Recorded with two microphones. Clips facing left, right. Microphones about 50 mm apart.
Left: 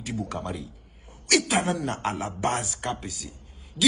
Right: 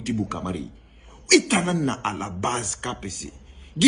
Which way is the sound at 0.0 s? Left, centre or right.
Right.